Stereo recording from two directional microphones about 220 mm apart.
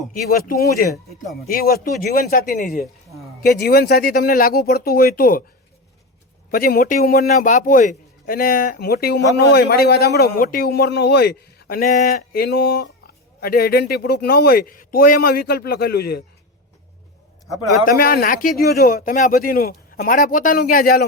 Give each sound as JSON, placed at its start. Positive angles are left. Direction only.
{"t": 0.3, "sound": "a man's voice", "side_deg": 40}
{"t": 6.5, "sound": "a man's voice", "side_deg": 40}
{"t": 17.8, "sound": "a man's voice", "side_deg": 45}